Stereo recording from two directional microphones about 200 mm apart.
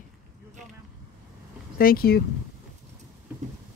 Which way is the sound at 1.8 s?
45° left (ahead or behind).